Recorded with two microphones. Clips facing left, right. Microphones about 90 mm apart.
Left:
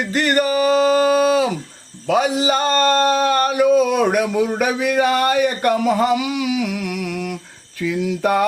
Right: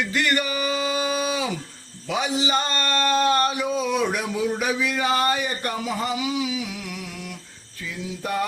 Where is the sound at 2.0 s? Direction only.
50° left (ahead or behind).